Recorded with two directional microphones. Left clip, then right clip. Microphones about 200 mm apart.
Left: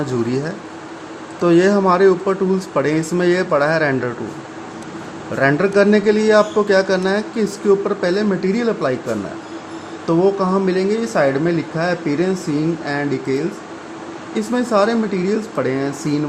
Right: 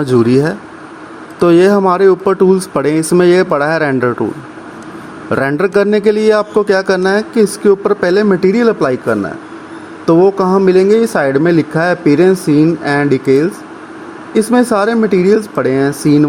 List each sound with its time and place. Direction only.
0.0 s a man's voice: 45° right (ahead or behind)
5.3 s a man's voice: 45° right (ahead or behind)